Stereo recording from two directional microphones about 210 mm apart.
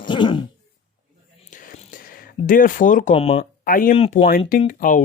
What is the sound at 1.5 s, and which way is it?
Whispering, 40° left (ahead or behind).